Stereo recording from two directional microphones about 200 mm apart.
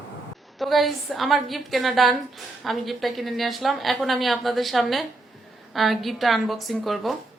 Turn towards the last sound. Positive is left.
turn(degrees=0)  # may be behind; listen again after turning